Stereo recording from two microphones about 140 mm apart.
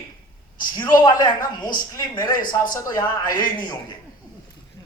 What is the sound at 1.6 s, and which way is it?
A man's voice, 30° left (ahead or behind).